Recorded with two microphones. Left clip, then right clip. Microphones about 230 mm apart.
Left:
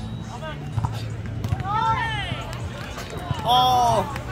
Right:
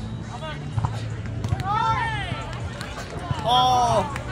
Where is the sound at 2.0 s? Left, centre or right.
Left.